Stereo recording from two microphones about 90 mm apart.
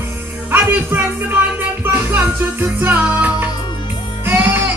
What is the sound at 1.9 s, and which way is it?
Music, 20° right (ahead or behind).